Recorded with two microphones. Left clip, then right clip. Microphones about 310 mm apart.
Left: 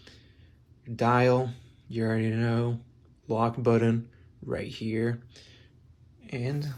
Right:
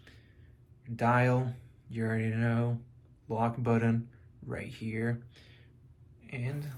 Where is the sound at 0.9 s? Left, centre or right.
Centre.